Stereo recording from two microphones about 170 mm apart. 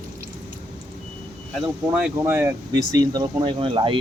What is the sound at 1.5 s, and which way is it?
Speech, 5° right (ahead or behind).